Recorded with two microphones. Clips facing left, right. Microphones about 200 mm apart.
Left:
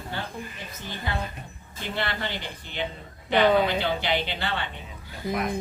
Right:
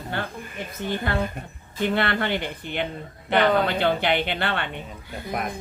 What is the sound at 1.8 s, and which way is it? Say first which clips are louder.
Speech: right 7 dB; 60° right (ahead or behind).